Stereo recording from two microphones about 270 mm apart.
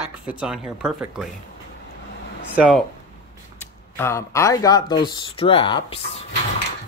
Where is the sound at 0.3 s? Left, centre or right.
Centre.